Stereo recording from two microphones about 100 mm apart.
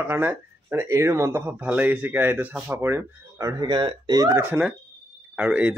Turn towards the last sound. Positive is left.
turn(degrees=-15)  # may be behind; listen again after turning